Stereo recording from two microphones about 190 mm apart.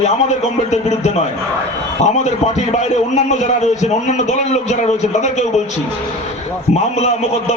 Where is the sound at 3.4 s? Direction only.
35° left (ahead or behind).